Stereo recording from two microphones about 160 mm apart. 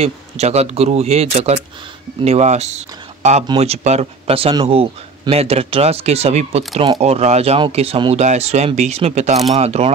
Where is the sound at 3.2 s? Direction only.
45° right (ahead or behind).